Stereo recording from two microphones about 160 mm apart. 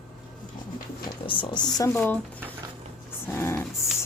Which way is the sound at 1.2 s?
30° left (ahead or behind).